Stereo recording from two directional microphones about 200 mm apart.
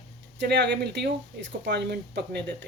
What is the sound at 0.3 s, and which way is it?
Speech, 60° right (ahead or behind).